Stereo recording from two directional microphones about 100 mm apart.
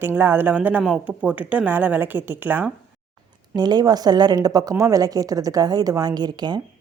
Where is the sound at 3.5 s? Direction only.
45° right (ahead or behind).